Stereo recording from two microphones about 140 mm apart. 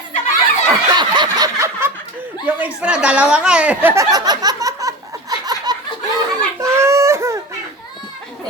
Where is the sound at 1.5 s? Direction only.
20° right (ahead or behind).